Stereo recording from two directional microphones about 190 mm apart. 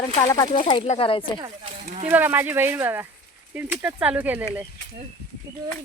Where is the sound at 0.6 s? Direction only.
30° left (ahead or behind).